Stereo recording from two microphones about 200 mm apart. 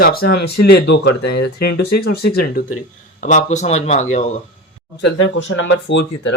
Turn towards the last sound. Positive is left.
turn(degrees=60)  # may be behind; listen again after turning